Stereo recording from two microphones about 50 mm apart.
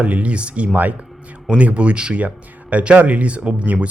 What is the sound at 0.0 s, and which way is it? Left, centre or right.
Speech, right.